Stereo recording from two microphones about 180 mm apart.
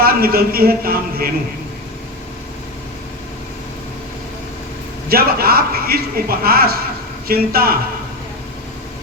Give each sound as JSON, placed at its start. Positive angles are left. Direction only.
{"t": 0.0, "sound": "a man's voice", "side_deg": -55}
{"t": 5.0, "sound": "a man's voice", "side_deg": -55}